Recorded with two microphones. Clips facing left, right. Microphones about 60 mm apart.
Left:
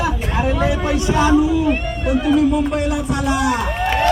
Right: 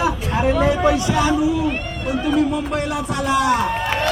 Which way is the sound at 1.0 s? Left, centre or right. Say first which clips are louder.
Left 3 dB; left.